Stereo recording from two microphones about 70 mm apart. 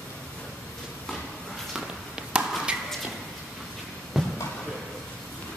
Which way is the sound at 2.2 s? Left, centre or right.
Centre.